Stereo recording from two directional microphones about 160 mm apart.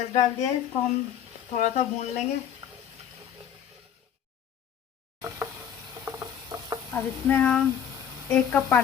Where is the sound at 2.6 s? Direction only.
30° right (ahead or behind).